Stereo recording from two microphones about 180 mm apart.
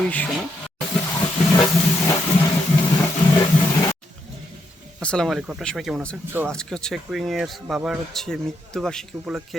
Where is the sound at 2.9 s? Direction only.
20° left (ahead or behind).